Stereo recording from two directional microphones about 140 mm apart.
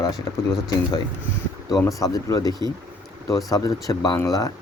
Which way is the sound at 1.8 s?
25° left (ahead or behind).